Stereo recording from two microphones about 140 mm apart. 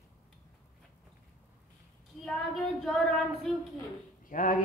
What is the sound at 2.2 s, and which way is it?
Child singing, 5° left (ahead or behind).